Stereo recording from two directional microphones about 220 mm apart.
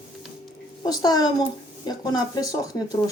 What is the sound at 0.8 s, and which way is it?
A child's voice, 15° left (ahead or behind).